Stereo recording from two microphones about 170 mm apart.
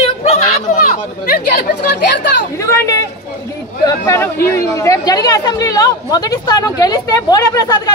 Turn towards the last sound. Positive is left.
turn(degrees=20)  # may be behind; listen again after turning